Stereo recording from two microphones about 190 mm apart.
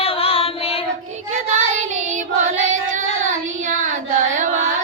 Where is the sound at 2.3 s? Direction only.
40° right (ahead or behind).